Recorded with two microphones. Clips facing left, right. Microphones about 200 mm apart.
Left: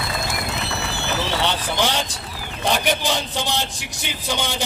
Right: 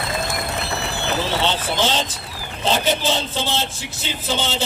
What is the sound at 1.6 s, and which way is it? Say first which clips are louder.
A man's voice: right 1 dB; 15° left (ahead or behind).